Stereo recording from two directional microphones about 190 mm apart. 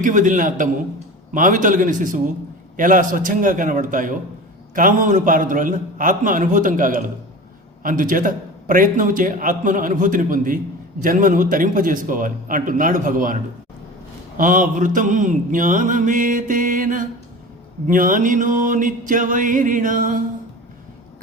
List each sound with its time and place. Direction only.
0.0 s a man's voice: 45° right (ahead or behind)